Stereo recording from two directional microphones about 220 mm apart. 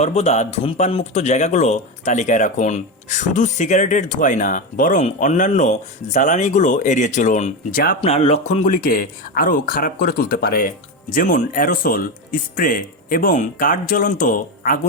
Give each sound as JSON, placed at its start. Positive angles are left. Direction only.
{"t": 0.0, "sound": "a man's voice", "side_deg": 30}
{"t": 8.0, "sound": "a man's voice", "side_deg": 25}